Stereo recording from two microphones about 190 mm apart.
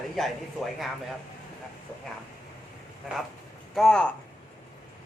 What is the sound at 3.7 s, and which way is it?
Speech, 5° left (ahead or behind).